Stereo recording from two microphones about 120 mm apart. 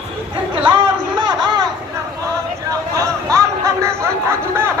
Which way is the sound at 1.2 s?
35° right (ahead or behind).